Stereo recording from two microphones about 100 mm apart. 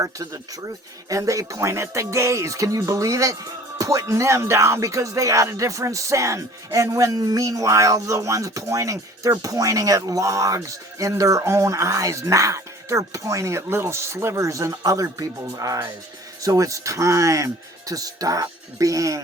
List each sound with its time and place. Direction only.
1.1 s music: 35° right (ahead or behind)